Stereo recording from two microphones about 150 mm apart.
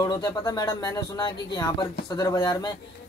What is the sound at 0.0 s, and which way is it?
Speech, 25° left (ahead or behind).